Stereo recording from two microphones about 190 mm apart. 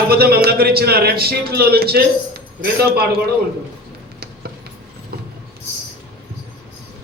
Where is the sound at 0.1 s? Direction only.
55° right (ahead or behind).